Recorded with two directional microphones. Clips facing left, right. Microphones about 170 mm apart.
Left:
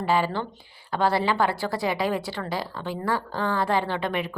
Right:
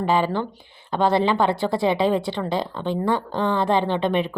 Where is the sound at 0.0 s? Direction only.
20° right (ahead or behind).